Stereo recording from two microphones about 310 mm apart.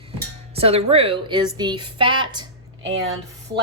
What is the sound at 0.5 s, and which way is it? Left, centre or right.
A woman's voice, centre.